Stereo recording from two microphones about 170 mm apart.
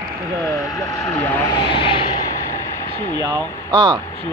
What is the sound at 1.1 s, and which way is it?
Speech, 25° left (ahead or behind).